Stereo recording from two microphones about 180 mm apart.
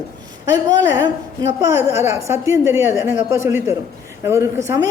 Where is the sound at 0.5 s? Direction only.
20° right (ahead or behind).